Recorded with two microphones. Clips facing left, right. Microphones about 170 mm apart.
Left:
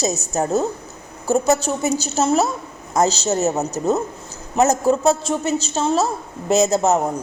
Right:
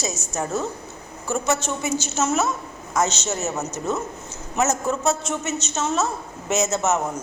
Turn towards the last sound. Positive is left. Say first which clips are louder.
# left 6 dB
turn(degrees=35)  # may be behind; listen again after turning